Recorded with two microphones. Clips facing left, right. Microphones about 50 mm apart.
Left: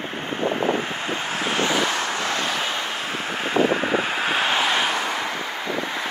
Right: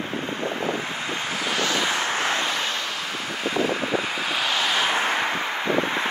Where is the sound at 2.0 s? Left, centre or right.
Right.